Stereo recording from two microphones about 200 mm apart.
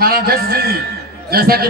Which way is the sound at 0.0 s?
50° right (ahead or behind).